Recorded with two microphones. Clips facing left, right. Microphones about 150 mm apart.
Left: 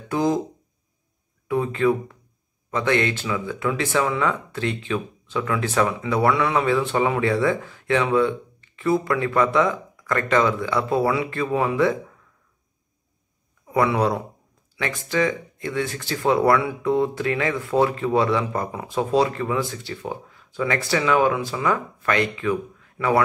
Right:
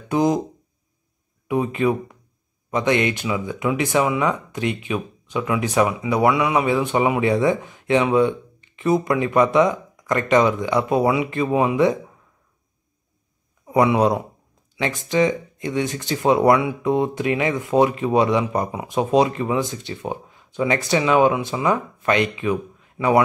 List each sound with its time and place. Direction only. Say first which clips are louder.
0.1 s speech: right 3 dB; 20° right (ahead or behind)
1.5 s speech: even; 15° right (ahead or behind)
13.7 s speech: right 3 dB; 20° right (ahead or behind)